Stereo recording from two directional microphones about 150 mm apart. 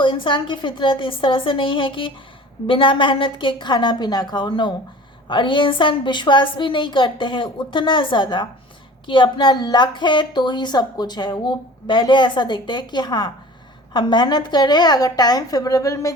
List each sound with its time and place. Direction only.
0.0 s a woman's voice: 35° left (ahead or behind)